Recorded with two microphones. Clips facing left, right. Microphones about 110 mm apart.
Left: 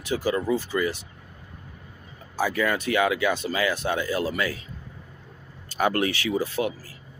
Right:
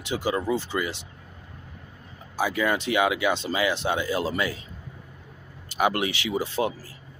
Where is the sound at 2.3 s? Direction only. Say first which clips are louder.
Even; 15° right (ahead or behind).